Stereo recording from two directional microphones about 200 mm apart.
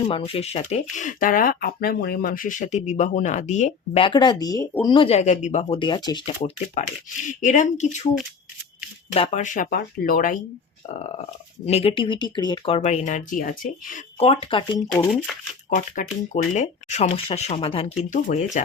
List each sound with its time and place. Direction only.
0.0 s speech: 30° left (ahead or behind); by 4.8 s 15° left (ahead or behind)
4.9 s speech: 25° left (ahead or behind)
5.6 s speech: 25° left (ahead or behind)
6.8 s speech: 35° left (ahead or behind)
9.1 s speech: 35° left (ahead or behind)
11.6 s speech: 30° left (ahead or behind)
14.2 s speech: 25° left (ahead or behind)
15.7 s speech: 35° left (ahead or behind)